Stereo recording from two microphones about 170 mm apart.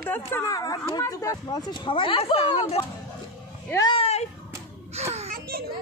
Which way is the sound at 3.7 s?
25° left (ahead or behind).